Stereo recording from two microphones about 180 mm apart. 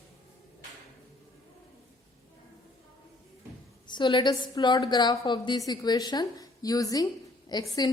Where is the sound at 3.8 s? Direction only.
25° left (ahead or behind).